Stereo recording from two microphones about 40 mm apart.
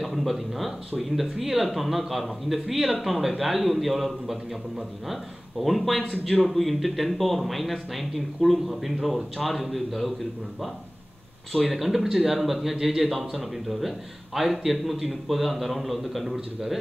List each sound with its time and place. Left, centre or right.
0.0 s speech: centre
11.6 s speech: centre